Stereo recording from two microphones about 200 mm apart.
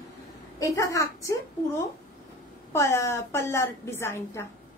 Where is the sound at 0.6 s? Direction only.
15° left (ahead or behind).